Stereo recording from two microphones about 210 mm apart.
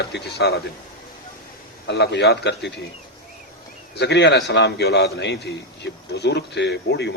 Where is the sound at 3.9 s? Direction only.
55° left (ahead or behind).